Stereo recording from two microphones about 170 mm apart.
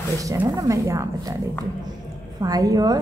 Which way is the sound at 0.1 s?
20° right (ahead or behind).